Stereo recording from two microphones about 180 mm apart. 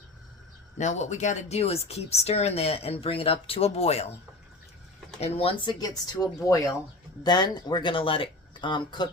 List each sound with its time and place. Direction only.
0.8 s speech: 40° left (ahead or behind)
5.2 s speech: 35° left (ahead or behind)